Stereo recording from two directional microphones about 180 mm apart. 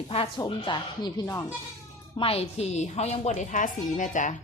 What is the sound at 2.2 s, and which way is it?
A woman's voice, 35° left (ahead or behind).